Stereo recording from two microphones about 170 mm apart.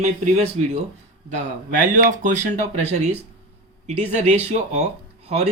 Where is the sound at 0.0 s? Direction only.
40° right (ahead or behind).